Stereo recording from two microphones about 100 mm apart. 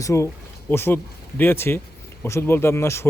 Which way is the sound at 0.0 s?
30° left (ahead or behind).